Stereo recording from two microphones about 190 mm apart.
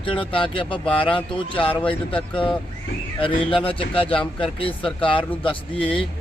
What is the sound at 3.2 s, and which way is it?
Speech, 25° left (ahead or behind).